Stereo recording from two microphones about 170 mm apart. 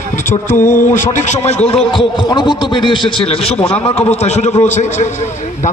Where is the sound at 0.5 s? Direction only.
50° left (ahead or behind).